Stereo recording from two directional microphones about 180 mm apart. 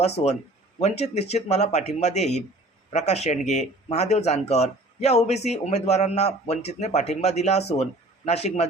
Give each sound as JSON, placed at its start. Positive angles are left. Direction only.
{"t": 0.2, "sound": "a man's voice", "side_deg": 35}